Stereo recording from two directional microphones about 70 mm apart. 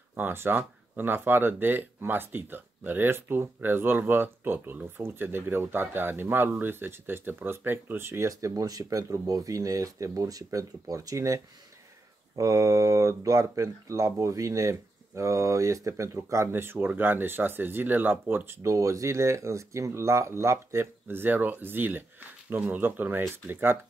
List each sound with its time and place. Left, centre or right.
0.1 s speech: right
18.6 s speech: right
21.1 s speech: right